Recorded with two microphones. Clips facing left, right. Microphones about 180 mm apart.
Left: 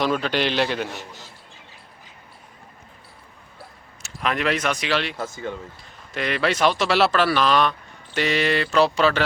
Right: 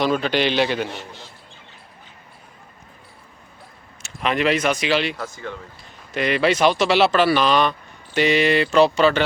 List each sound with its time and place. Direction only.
0.0 s speech: centre (ahead or behind)
4.0 s speech: centre (ahead or behind)
5.1 s speech: 20° left (ahead or behind)
6.1 s speech: centre (ahead or behind)